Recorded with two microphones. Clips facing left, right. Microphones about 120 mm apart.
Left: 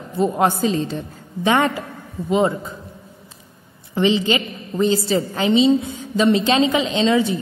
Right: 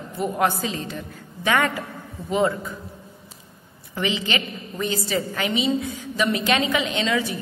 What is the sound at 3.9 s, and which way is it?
A woman's voice, 25° left (ahead or behind).